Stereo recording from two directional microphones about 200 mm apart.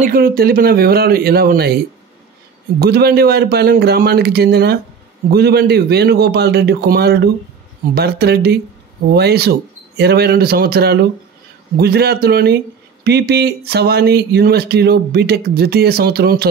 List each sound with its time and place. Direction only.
0.0 s speech: 45° right (ahead or behind)
2.8 s speech: 50° right (ahead or behind)